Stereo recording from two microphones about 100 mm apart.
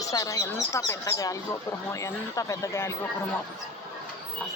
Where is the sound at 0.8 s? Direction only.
35° left (ahead or behind).